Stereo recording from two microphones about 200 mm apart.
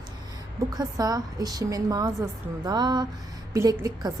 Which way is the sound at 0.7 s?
20° right (ahead or behind).